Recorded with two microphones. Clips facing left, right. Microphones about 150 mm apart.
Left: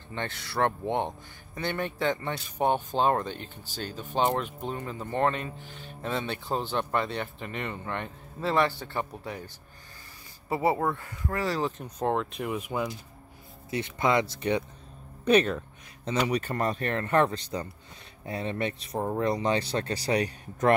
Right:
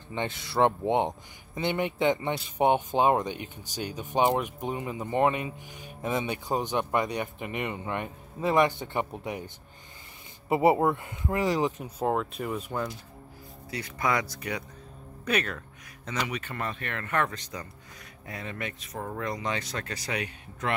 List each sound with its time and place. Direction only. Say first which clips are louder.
0.1 s speech: right 3 dB; 20° right (ahead or behind)
10.5 s speech: right 4 dB; 20° right (ahead or behind)
11.8 s speech: even; 5° right (ahead or behind)
13.7 s speech: left 3 dB; 25° left (ahead or behind)